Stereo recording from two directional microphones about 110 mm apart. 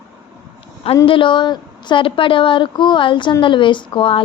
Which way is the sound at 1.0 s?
50° left (ahead or behind).